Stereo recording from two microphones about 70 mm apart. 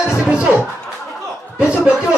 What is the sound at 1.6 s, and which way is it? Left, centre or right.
Speech, centre.